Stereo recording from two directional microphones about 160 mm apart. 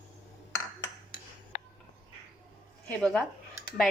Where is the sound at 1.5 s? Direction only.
55° left (ahead or behind).